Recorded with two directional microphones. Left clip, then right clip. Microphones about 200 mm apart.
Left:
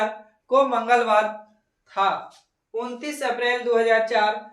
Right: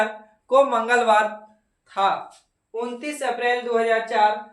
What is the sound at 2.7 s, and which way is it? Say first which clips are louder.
Speech: right 1 dB; centre (ahead or behind).